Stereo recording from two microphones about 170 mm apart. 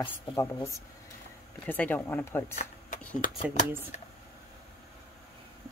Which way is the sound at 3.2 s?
55° left (ahead or behind).